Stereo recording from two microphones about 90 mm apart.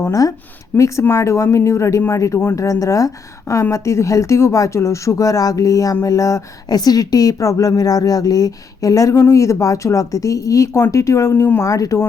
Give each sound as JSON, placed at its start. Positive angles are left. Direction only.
{"t": 0.0, "sound": "speech", "side_deg": 40}
{"t": 11.6, "sound": "speech", "side_deg": 40}